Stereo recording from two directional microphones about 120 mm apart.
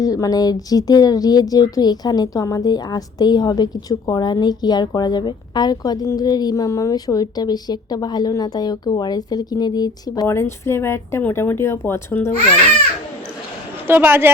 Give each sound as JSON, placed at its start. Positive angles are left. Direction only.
{"t": 0.0, "sound": "speech", "side_deg": 30}
{"t": 10.2, "sound": "speech", "side_deg": 20}
{"t": 13.8, "sound": "a woman's voice", "side_deg": -15}